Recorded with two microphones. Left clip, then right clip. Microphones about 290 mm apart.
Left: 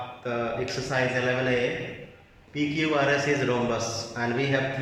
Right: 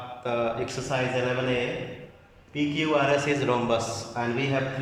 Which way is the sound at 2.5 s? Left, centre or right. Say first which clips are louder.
Right 1 dB; centre.